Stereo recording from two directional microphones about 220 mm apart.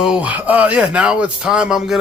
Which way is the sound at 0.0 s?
5° right (ahead or behind).